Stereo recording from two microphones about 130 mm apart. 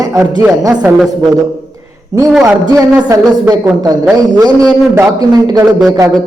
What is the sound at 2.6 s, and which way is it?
Speech, 25° right (ahead or behind).